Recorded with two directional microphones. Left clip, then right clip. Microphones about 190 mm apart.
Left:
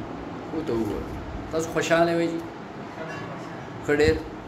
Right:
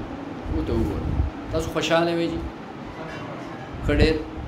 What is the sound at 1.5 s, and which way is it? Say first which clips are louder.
Speech: even; centre (ahead or behind).